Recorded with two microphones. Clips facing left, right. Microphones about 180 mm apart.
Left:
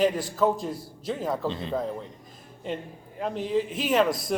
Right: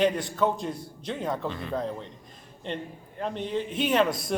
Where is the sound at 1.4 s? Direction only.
20° left (ahead or behind).